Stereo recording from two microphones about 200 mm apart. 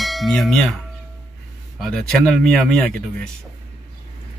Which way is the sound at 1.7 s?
Centre (ahead or behind).